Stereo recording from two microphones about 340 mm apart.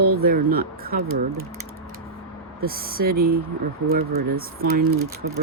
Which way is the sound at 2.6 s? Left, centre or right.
Right.